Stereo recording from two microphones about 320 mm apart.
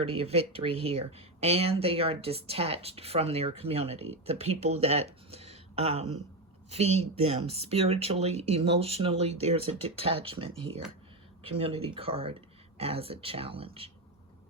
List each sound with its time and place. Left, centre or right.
0.0 s speech: centre
11.5 s speech: centre